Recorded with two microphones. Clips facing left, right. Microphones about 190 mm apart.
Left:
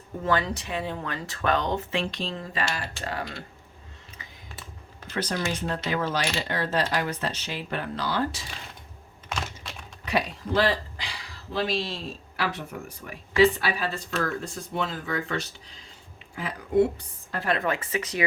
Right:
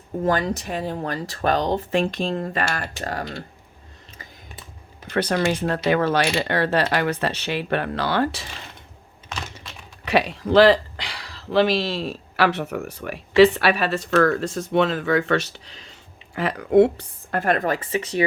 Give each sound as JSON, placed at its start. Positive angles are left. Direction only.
{"t": 0.2, "sound": "speech", "side_deg": -45}
{"t": 5.0, "sound": "speech", "side_deg": -65}
{"t": 10.1, "sound": "speech", "side_deg": -85}